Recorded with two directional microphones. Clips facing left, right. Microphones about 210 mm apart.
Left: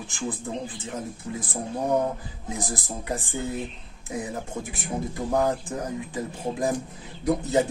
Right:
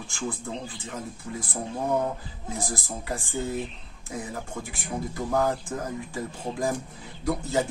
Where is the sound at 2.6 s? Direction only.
20° left (ahead or behind).